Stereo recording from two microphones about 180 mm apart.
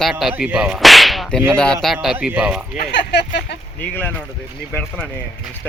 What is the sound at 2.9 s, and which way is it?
Speech, 70° left (ahead or behind).